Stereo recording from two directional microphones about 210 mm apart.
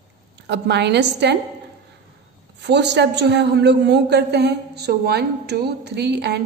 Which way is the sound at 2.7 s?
55° right (ahead or behind).